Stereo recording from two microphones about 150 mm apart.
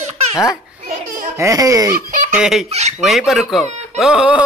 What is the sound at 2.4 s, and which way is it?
Speech, centre (ahead or behind).